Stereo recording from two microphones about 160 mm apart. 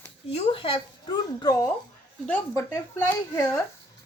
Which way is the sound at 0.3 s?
35° left (ahead or behind).